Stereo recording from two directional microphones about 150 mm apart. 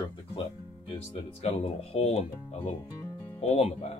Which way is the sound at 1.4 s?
40° left (ahead or behind).